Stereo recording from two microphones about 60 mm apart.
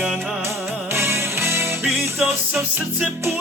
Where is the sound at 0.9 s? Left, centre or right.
Right.